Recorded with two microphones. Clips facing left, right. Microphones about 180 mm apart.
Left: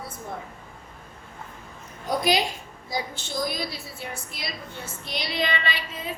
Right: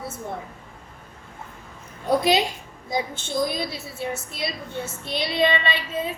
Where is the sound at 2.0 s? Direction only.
25° right (ahead or behind).